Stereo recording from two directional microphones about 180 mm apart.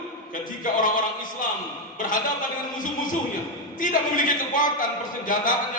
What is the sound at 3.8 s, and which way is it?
A man's voice, 50° left (ahead or behind).